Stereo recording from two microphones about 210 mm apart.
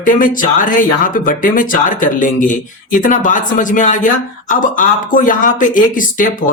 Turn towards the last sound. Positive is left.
turn(degrees=40)  # may be behind; listen again after turning